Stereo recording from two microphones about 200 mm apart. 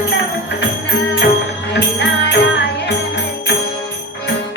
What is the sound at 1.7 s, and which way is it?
Music, 60° left (ahead or behind).